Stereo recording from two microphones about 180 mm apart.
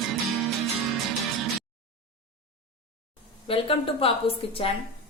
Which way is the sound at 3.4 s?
30° left (ahead or behind).